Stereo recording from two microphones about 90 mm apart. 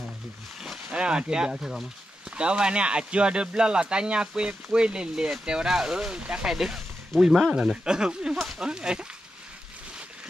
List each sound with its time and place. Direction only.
0.9 s speech: 10° right (ahead or behind)